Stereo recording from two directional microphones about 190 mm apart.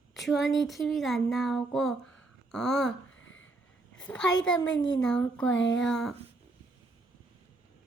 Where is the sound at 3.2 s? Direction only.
90° left.